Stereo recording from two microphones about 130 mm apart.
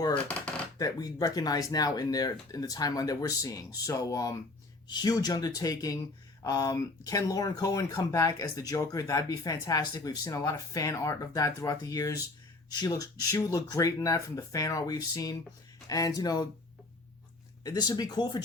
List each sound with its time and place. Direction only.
0.1 s a sound: 10° left (ahead or behind)
0.8 s speech: 30° left (ahead or behind)
17.6 s speech: 30° left (ahead or behind)